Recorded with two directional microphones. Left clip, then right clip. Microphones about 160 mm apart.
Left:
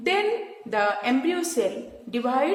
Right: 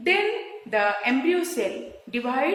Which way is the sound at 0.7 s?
45° left (ahead or behind).